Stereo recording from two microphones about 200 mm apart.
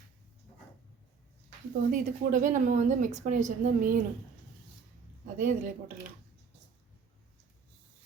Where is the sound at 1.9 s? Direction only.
40° right (ahead or behind).